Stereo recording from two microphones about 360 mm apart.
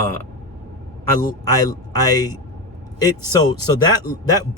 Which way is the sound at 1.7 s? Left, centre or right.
Centre.